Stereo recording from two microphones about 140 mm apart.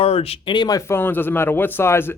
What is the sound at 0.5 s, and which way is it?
Speech, 25° left (ahead or behind).